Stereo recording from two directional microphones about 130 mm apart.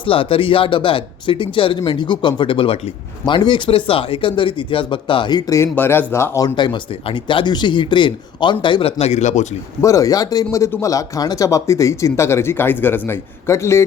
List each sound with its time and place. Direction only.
0.0 s speech: 45° left (ahead or behind); by 5.6 s 25° left (ahead or behind)
5.7 s speech: 15° left (ahead or behind)
6.6 s speech: 40° left (ahead or behind); by 9.5 s 65° left (ahead or behind)
9.8 s speech: 25° left (ahead or behind)